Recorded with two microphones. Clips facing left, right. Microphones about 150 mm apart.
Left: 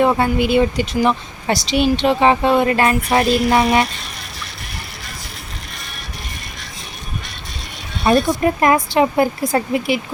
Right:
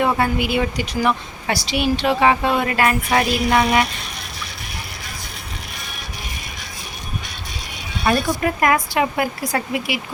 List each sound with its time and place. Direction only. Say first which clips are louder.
0.0 s speech: left 4 dB; 25° left (ahead or behind)
3.1 s music: left 3 dB; centre (ahead or behind)
8.1 s speech: left 4 dB; 25° left (ahead or behind)